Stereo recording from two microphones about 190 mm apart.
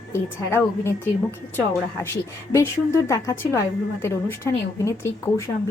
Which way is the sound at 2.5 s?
15° left (ahead or behind).